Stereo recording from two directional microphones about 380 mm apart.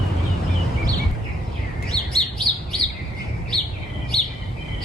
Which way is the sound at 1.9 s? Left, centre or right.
Centre.